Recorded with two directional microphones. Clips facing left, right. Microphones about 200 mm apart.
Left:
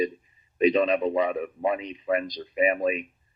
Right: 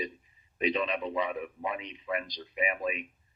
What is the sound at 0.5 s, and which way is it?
Speech, 45° left (ahead or behind).